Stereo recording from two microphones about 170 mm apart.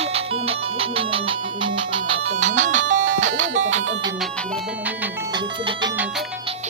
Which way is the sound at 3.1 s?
45° right (ahead or behind).